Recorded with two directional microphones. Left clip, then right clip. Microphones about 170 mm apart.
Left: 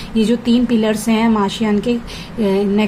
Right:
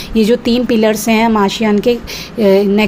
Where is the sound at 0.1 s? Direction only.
40° right (ahead or behind).